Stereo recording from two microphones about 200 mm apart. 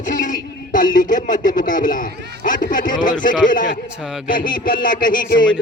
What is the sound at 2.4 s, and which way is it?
A man's voice, 40° left (ahead or behind).